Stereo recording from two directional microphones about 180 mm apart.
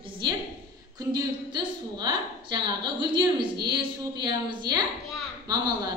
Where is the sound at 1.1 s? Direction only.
25° right (ahead or behind).